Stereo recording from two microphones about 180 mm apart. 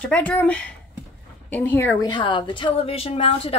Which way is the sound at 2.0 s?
25° left (ahead or behind).